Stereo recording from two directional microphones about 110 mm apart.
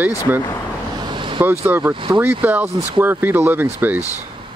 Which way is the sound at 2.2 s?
15° right (ahead or behind).